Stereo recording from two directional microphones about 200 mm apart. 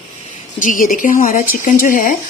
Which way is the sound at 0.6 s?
40° left (ahead or behind).